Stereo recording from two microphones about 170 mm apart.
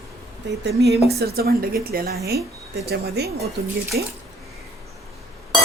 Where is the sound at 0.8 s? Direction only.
75° right (ahead or behind).